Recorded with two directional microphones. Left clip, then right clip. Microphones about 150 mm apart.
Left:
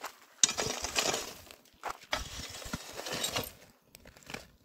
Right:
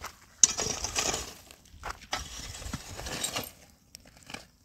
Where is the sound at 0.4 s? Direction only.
25° left (ahead or behind).